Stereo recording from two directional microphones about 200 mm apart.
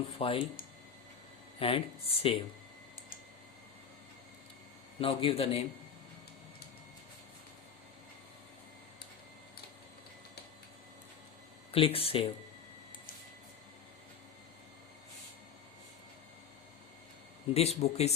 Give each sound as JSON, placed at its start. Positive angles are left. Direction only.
{"t": 0.2, "sound": "speech", "side_deg": 30}
{"t": 1.5, "sound": "speech", "side_deg": 30}
{"t": 4.9, "sound": "speech", "side_deg": 25}
{"t": 11.7, "sound": "speech", "side_deg": 30}
{"t": 17.5, "sound": "speech", "side_deg": 30}